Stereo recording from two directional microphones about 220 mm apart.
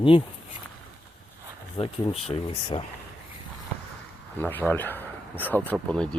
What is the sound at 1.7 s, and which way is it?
Speech, 25° left (ahead or behind).